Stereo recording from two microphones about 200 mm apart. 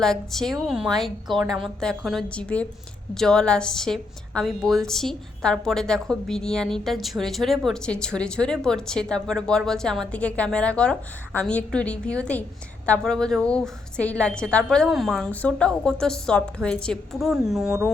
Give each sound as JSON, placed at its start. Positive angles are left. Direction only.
{"t": 0.0, "sound": "a woman's voice", "side_deg": 0}